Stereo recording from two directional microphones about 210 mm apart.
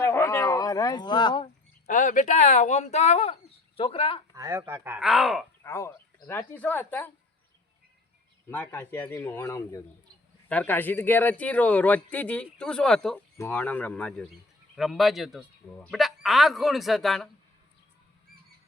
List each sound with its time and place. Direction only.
0.0 s speech: 10° left (ahead or behind)
1.9 s speech: 40° left (ahead or behind)
4.4 s speech: 15° right (ahead or behind)
5.6 s a man's voice: 15° left (ahead or behind)
8.4 s a man's voice: 10° left (ahead or behind)